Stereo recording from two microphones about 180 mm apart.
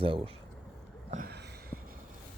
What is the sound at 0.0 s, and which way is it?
Speech, 30° right (ahead or behind).